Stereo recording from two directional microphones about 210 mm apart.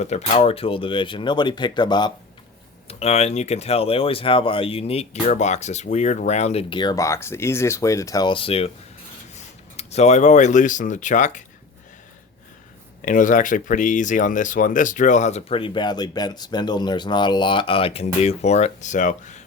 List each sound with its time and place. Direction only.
0.0 s speech: 30° left (ahead or behind)
13.0 s speech: 40° left (ahead or behind)